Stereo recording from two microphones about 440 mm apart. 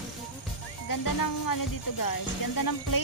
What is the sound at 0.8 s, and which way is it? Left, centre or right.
Music, left.